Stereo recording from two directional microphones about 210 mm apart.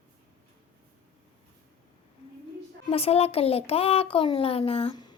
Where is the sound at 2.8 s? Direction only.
30° left (ahead or behind).